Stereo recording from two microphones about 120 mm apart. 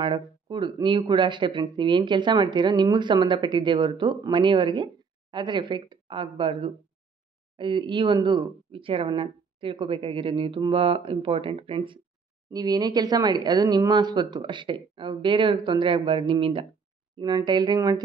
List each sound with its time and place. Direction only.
0.0 s speech: 40° right (ahead or behind)
12.4 s speech: 35° right (ahead or behind)
17.2 s speech: 35° right (ahead or behind)